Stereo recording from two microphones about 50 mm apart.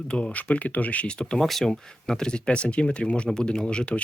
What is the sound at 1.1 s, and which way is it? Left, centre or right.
Speech, centre.